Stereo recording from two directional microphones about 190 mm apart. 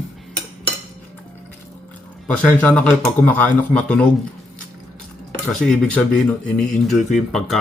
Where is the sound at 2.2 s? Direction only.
5° left (ahead or behind).